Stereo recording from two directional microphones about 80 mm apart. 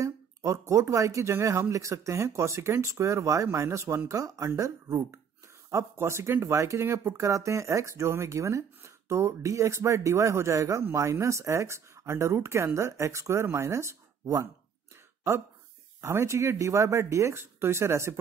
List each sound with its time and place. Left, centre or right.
0.0 s speech: right
16.0 s speech: right